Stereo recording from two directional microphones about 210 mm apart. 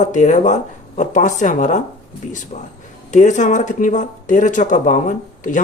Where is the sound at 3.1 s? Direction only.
35° left (ahead or behind).